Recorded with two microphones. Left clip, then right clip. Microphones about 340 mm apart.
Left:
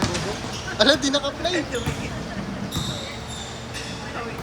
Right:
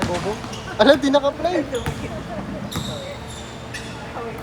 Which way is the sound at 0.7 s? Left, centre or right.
Centre.